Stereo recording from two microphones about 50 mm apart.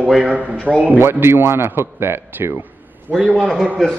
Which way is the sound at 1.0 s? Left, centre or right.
Right.